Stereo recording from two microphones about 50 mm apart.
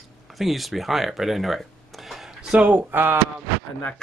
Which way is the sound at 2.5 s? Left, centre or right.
Right.